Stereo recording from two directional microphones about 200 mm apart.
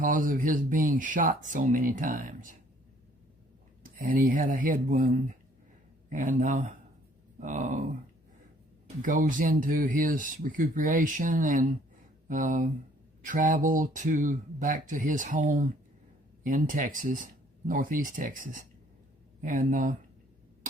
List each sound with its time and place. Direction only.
0.0 s speech: 40° right (ahead or behind)
3.8 s speech: 45° right (ahead or behind)
9.0 s speech: 40° right (ahead or behind)